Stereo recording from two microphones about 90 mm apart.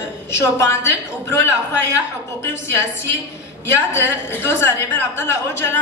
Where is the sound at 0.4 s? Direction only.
30° left (ahead or behind).